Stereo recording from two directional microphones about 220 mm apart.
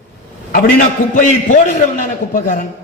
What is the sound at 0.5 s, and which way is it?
A man's voice, 40° left (ahead or behind).